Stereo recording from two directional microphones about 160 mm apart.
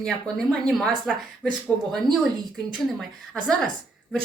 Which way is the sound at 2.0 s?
30° right (ahead or behind).